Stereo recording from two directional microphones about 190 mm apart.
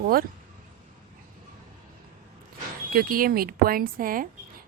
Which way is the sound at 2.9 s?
50° right (ahead or behind).